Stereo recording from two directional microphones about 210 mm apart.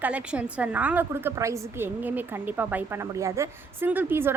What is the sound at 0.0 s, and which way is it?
A woman's voice, 5° right (ahead or behind).